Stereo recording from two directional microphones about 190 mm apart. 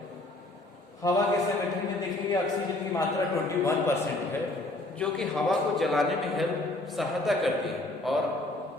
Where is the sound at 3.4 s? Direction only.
15° left (ahead or behind).